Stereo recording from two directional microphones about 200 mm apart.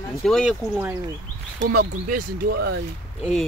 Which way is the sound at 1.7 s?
50° right (ahead or behind).